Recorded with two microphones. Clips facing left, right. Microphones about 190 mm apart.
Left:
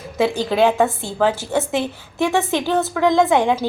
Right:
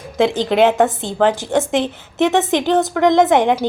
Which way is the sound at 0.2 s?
20° right (ahead or behind).